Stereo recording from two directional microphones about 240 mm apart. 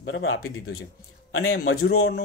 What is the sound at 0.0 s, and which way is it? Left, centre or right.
A man's voice, left.